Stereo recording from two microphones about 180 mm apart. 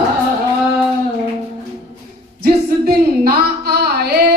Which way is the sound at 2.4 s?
60° right (ahead or behind).